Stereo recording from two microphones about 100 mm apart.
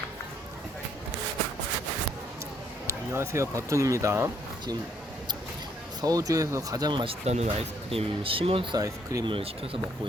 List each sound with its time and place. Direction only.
2.8 s a sound: 30° right (ahead or behind)
3.7 s speech: 30° right (ahead or behind)
6.0 s speech: 35° right (ahead or behind)
7.0 s speech: 80° right; by 8.6 s 65° right (ahead or behind)
8.7 s speech: 35° right (ahead or behind)
9.2 s speech: 60° right (ahead or behind)